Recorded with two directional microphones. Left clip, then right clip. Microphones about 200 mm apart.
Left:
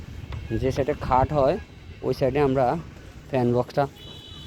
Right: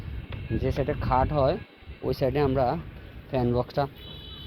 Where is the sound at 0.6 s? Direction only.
15° left (ahead or behind).